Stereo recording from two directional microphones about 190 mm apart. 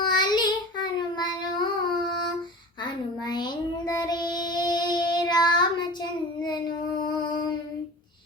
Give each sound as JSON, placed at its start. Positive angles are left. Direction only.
{"t": 0.0, "sound": "child singing", "side_deg": 20}
{"t": 3.2, "sound": "child singing", "side_deg": 20}